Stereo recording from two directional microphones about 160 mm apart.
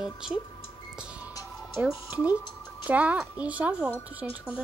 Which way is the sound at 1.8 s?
10° right (ahead or behind).